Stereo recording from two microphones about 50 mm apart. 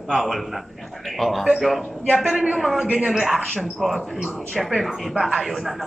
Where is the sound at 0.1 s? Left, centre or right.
Centre.